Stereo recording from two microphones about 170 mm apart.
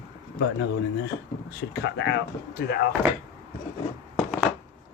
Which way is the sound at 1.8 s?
90° left.